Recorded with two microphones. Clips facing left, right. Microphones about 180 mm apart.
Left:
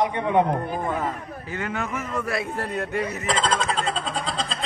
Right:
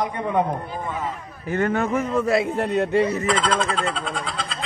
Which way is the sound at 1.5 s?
45° right (ahead or behind).